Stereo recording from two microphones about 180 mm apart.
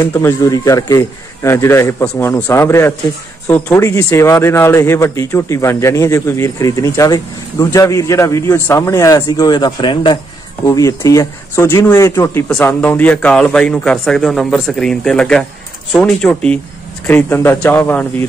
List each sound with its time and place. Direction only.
0.0 s a man's voice: 15° left (ahead or behind)